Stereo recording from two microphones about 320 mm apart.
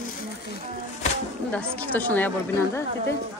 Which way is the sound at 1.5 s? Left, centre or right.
Centre.